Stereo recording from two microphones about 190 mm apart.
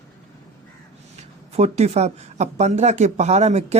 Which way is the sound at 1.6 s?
35° right (ahead or behind).